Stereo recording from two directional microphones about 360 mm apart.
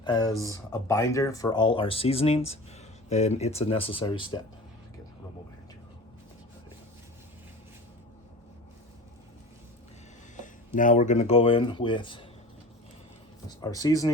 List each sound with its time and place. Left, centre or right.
0.0 s speech: centre
10.3 s speech: left
13.6 s speech: centre